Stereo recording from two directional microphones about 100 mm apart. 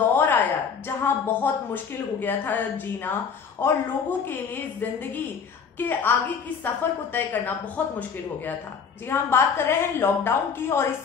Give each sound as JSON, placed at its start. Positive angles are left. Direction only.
{"t": 0.0, "sound": "a woman's voice", "side_deg": 20}
{"t": 9.1, "sound": "a woman's voice", "side_deg": 25}